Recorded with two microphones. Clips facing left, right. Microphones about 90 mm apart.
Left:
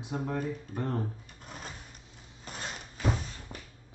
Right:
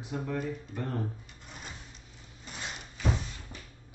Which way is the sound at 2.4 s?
45° left (ahead or behind).